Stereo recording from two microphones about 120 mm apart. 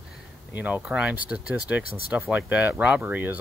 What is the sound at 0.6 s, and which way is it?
Speech, 10° right (ahead or behind).